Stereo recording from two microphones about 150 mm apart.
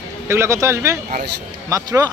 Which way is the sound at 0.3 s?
20° right (ahead or behind).